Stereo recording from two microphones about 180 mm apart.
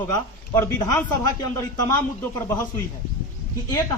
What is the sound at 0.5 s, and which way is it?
A man's voice, 15° left (ahead or behind).